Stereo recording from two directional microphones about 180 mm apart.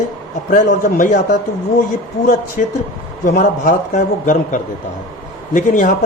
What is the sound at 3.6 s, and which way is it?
Speech, 50° left (ahead or behind).